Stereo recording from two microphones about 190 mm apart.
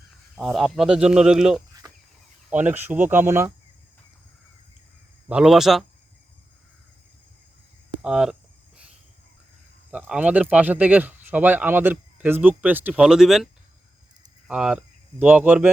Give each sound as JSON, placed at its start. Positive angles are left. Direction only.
{"t": 0.3, "sound": "speech", "side_deg": 0}
{"t": 1.8, "sound": "chicken", "side_deg": -20}
{"t": 2.5, "sound": "speech", "side_deg": -10}
{"t": 5.3, "sound": "speech", "side_deg": -5}
{"t": 8.0, "sound": "cricket", "side_deg": -5}
{"t": 9.9, "sound": "speech", "side_deg": -5}